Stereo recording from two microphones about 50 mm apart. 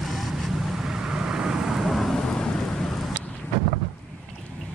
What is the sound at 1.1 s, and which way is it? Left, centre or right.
Vehicle, centre.